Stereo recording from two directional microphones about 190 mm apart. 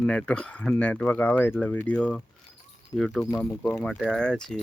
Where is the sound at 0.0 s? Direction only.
5° left (ahead or behind).